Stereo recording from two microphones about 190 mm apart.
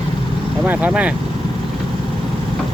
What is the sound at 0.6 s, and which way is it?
Speech, 5° right (ahead or behind).